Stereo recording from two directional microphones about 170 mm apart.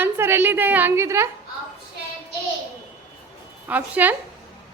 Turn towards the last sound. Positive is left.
turn(degrees=-10)  # may be behind; listen again after turning